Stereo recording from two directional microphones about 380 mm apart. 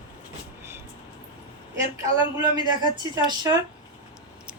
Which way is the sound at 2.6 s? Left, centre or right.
Centre.